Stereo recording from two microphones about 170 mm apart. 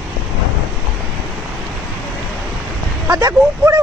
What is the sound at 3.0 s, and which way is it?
Speech, 20° right (ahead or behind).